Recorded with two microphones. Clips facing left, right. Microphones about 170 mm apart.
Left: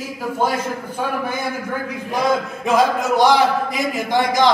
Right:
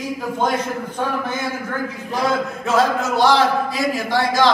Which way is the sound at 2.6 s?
15° left (ahead or behind).